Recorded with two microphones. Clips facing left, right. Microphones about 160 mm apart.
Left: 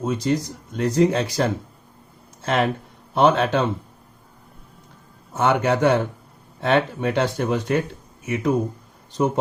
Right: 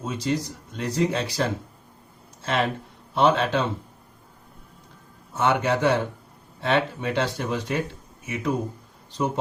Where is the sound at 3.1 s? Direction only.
45° left (ahead or behind).